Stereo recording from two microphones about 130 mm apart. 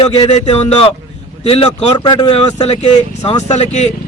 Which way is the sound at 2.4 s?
55° left (ahead or behind).